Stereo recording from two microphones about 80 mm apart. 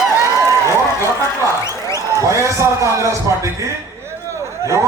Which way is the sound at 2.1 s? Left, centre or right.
Right.